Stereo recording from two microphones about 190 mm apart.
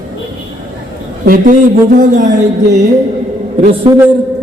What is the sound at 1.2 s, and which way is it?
Speech, 45° right (ahead or behind).